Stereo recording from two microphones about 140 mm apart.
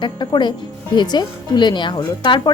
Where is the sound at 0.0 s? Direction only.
35° left (ahead or behind).